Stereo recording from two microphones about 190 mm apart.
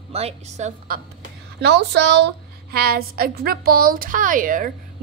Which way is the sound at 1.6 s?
60° right (ahead or behind).